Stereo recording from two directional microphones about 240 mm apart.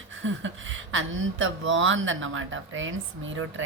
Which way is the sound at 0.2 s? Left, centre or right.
Right.